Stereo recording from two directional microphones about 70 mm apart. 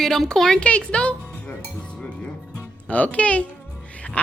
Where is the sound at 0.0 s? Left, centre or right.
Centre.